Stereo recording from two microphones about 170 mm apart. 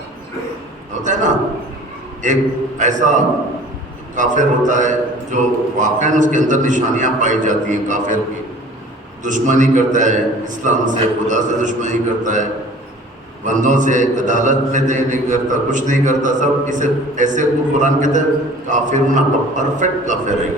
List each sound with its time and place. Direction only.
1.0 s a man's voice: 45° right (ahead or behind)
9.2 s a man's voice: 45° right (ahead or behind)